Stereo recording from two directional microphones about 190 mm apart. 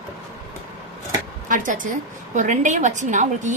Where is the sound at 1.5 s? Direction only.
45° right (ahead or behind).